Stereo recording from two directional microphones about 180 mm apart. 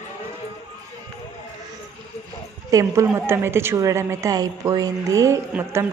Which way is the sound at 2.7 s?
20° right (ahead or behind).